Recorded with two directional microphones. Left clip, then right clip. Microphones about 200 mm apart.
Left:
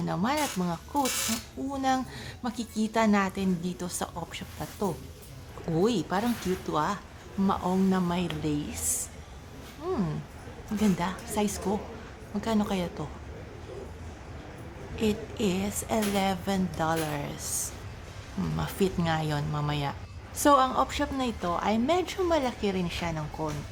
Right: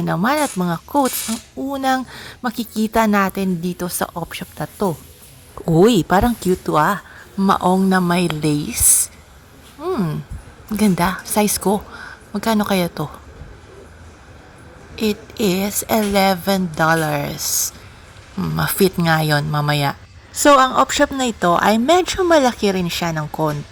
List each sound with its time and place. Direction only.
0.0 s speech: 35° right (ahead or behind)
10.8 s speech: 35° right (ahead or behind)
14.9 s speech: 30° right (ahead or behind)